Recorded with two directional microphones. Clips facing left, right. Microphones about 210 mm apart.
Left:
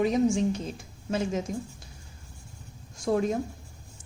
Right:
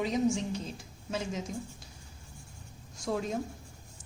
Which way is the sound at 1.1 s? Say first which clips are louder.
Left 7 dB; 55° left (ahead or behind).